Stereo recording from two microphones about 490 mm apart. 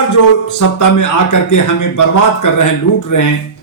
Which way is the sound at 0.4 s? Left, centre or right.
Left.